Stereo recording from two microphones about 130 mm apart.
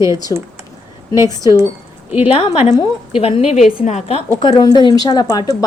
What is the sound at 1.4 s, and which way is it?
Speech, 20° right (ahead or behind).